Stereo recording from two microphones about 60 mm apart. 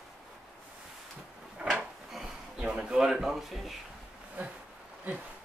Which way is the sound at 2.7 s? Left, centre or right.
Centre.